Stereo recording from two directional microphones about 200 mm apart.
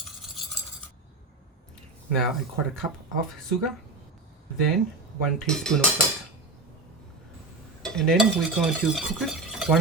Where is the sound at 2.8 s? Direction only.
20° right (ahead or behind).